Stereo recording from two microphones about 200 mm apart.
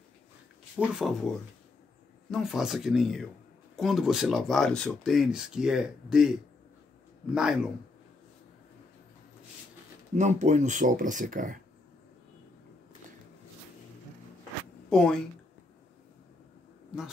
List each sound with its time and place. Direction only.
0.7 s speech: 5° right (ahead or behind)
2.3 s speech: centre (ahead or behind)
7.3 s speech: 5° right (ahead or behind)
10.1 s speech: 35° right (ahead or behind)
14.9 s speech: 5° left (ahead or behind)